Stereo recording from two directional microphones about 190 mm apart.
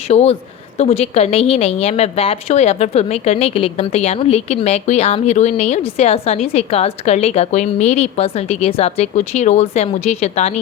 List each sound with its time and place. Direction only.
0.1 s a woman's voice: 35° left (ahead or behind)